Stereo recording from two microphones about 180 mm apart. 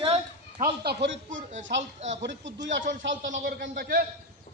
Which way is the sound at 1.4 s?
45° right (ahead or behind).